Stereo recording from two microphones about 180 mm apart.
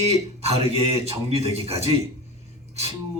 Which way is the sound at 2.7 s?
35° right (ahead or behind).